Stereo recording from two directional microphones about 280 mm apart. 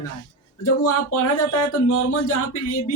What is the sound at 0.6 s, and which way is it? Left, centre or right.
Speech, left.